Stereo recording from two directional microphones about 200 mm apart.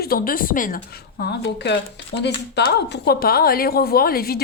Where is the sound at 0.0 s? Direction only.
45° left (ahead or behind).